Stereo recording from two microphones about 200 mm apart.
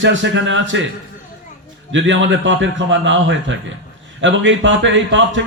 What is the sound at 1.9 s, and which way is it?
A man's voice, 65° right (ahead or behind).